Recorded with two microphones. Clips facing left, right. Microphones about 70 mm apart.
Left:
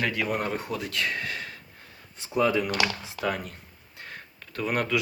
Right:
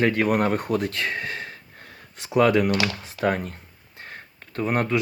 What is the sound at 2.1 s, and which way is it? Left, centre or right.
Speech, right.